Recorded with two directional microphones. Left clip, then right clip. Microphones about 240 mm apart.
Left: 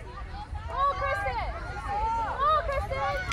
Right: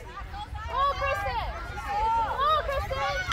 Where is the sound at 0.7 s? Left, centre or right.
Right.